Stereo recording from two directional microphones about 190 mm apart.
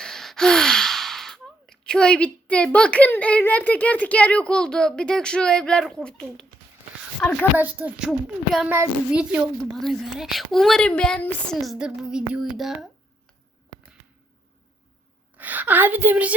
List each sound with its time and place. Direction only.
0.0 s a child's voice: centre (ahead or behind)
7.5 s a child's voice: 10° right (ahead or behind)
15.4 s a woman's voice: 10° right (ahead or behind)